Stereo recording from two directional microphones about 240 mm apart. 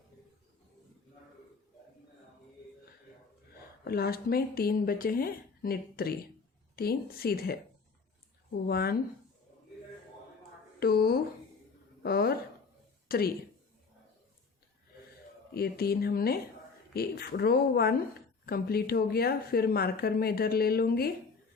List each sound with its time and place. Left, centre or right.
3.8 s speech: left
8.6 s speech: left
10.8 s a woman's voice: left
15.5 s speech: left